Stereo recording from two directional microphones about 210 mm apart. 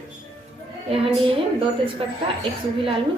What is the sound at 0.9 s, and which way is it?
A woman's voice, 25° right (ahead or behind).